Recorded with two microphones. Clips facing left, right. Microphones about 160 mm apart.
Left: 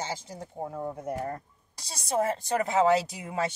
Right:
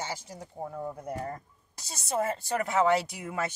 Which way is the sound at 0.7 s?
40° left (ahead or behind).